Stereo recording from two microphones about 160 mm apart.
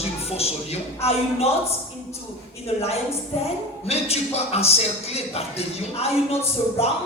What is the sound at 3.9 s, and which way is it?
A man's voice, 40° left (ahead or behind).